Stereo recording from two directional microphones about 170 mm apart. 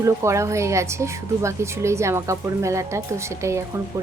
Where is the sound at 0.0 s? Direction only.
15° right (ahead or behind).